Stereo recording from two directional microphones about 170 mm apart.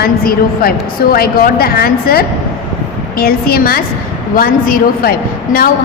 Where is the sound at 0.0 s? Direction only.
60° left (ahead or behind).